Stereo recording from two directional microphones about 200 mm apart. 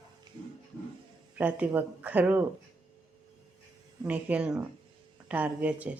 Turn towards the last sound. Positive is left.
turn(degrees=-5)  # may be behind; listen again after turning